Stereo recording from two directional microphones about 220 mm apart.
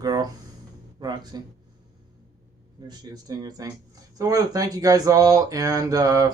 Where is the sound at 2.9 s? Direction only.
15° right (ahead or behind).